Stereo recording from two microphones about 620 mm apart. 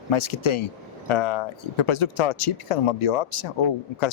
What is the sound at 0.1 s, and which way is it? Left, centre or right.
Speech, left.